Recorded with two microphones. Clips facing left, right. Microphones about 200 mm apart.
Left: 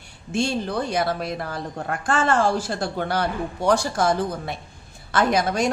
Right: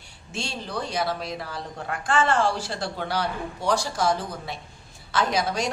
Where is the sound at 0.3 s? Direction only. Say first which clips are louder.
Left 9 dB; 50° left (ahead or behind).